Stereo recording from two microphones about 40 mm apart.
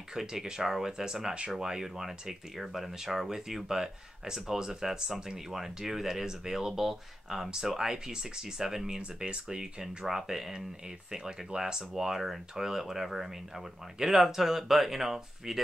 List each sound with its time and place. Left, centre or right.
0.1 s speech: centre